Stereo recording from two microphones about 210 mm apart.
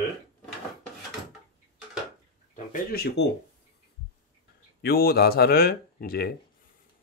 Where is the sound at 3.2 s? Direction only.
55° left (ahead or behind).